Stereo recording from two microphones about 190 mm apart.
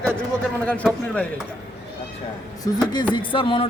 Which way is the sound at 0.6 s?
5° left (ahead or behind).